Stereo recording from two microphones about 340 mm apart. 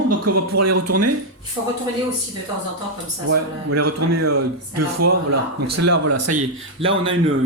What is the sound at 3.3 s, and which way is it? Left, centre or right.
Speech, right.